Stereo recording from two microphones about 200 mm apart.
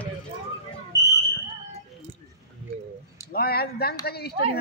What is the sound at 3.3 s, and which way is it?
Speech, 50° left (ahead or behind).